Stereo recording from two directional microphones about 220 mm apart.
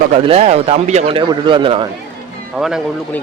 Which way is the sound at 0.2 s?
25° right (ahead or behind).